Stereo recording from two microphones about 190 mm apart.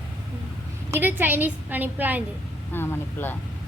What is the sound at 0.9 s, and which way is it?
A woman's voice, 10° right (ahead or behind).